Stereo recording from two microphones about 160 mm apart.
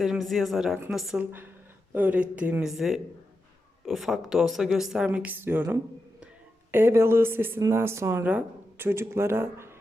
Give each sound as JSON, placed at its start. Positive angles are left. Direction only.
{"t": 0.0, "sound": "speech", "side_deg": 0}